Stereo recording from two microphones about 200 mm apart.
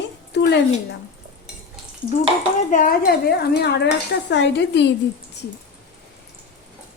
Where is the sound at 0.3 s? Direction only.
60° left (ahead or behind).